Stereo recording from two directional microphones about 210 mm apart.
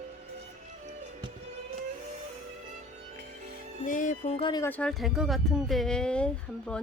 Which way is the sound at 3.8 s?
40° left (ahead or behind).